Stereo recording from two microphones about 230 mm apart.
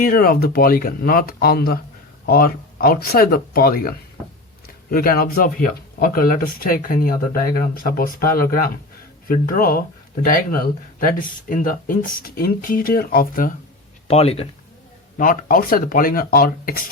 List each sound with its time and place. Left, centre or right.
0.0 s speech: left
14.1 s speech: left
15.2 s speech: left